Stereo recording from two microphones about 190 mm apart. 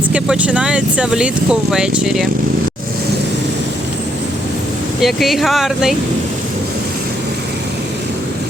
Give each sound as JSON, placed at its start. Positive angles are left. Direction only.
{"t": 0.1, "sound": "speech", "side_deg": -5}
{"t": 4.9, "sound": "speech", "side_deg": 0}